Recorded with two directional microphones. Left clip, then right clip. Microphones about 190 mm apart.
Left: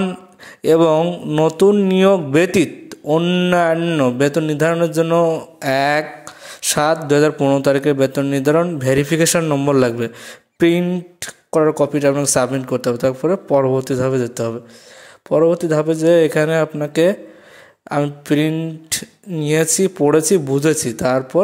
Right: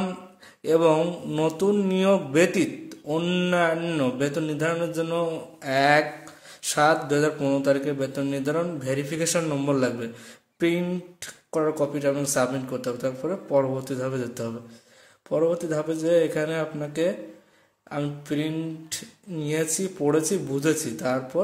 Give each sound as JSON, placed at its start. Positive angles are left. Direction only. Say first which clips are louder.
{"t": 0.6, "sound": "speech", "louder": "left 7 dB", "side_deg": 40}
{"t": 0.9, "sound": "speech", "louder": "left 8 dB", "side_deg": 25}
{"t": 1.4, "sound": "speech", "louder": "left 10 dB", "side_deg": 35}
{"t": 3.1, "sound": "speech", "louder": "left 9 dB", "side_deg": 25}